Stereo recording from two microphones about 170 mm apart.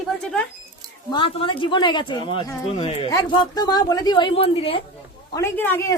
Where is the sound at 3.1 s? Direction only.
20° left (ahead or behind).